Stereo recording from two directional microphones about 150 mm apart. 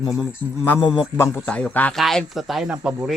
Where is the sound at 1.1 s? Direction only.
15° left (ahead or behind).